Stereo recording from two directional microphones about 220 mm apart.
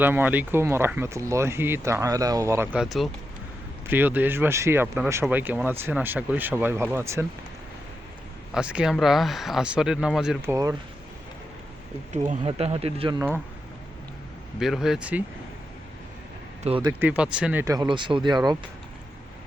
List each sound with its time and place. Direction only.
0.0 s speech: 10° right (ahead or behind)
8.5 s speech: 5° right (ahead or behind)
12.1 s speech: 30° right (ahead or behind)
14.6 s speech: centre (ahead or behind)
16.6 s speech: 25° right (ahead or behind)
17.0 s speech: 5° right (ahead or behind)